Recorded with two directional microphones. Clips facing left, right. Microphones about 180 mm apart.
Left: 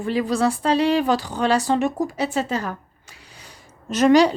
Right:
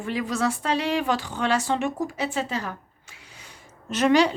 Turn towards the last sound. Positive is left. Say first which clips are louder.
# left 5 dB
turn(degrees=40)  # may be behind; listen again after turning